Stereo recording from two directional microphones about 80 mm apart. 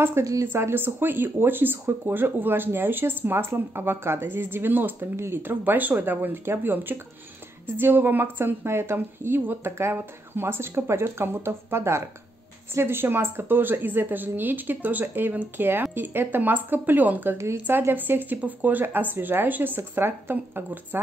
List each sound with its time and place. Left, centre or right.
0.2 s speech: right
0.5 s speech: right